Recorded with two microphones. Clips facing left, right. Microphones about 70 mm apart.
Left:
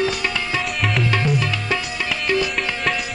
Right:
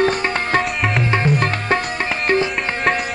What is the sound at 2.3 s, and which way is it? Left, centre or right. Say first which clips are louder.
Music: right 3 dB; right.